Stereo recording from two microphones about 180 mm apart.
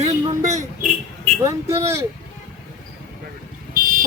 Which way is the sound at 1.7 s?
35° right (ahead or behind).